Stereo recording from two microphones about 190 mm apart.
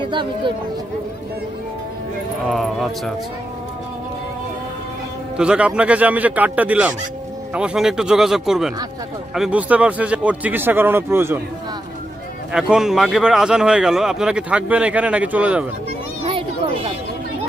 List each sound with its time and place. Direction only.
2.4 s speech: centre (ahead or behind)
5.4 s speech: 5° right (ahead or behind)
12.5 s speech: 5° right (ahead or behind)
16.3 s children playing: 30° right (ahead or behind)